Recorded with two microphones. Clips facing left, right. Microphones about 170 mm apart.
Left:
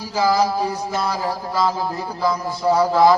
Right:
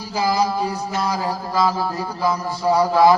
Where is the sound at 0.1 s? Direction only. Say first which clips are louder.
Left 2 dB; 15° right (ahead or behind).